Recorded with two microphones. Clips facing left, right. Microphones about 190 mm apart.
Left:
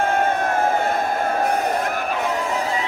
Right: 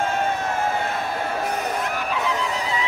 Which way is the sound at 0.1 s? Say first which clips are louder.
Left 4 dB; 55° left (ahead or behind).